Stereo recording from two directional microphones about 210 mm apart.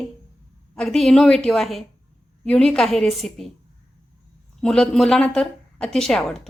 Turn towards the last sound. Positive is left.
turn(degrees=0)  # may be behind; listen again after turning